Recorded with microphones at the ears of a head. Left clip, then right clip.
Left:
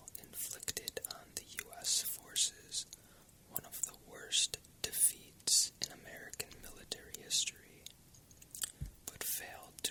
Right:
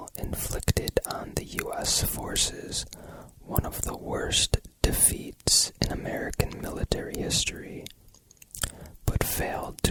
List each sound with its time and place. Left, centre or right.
0.0 s whispering: right